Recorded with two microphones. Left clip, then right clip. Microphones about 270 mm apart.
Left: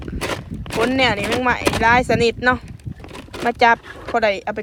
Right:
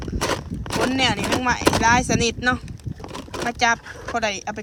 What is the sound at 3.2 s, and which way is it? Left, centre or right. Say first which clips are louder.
Speech: left 5 dB; centre.